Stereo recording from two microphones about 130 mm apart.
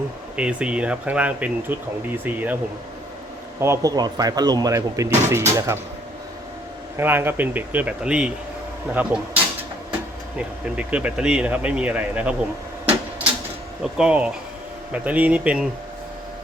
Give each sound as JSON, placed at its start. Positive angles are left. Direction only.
{"t": 0.3, "sound": "speech", "side_deg": -10}
{"t": 3.6, "sound": "speech", "side_deg": -25}
{"t": 6.9, "sound": "speech", "side_deg": -15}
{"t": 13.8, "sound": "speech", "side_deg": -5}